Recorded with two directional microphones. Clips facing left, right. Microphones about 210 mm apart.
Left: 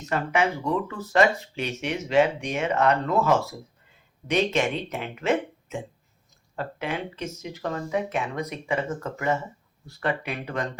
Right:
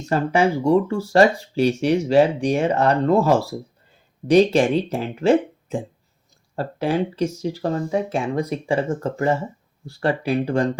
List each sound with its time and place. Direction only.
0.0 s speech: 35° right (ahead or behind)